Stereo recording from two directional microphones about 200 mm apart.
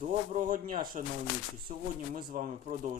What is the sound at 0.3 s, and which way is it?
A man's voice, 40° right (ahead or behind).